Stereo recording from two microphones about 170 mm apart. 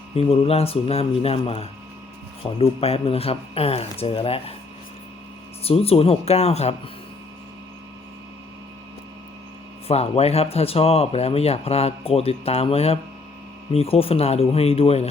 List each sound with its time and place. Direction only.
0.2 s speech: 35° left (ahead or behind)
5.6 s speech: 35° left (ahead or behind)
9.8 s speech: 35° left (ahead or behind)